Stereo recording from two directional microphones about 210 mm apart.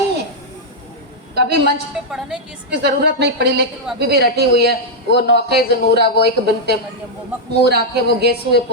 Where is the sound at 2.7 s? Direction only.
50° right (ahead or behind).